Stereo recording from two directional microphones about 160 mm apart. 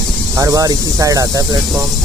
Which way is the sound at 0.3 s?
20° right (ahead or behind).